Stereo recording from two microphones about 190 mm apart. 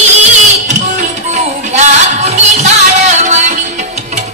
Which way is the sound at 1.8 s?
35° right (ahead or behind).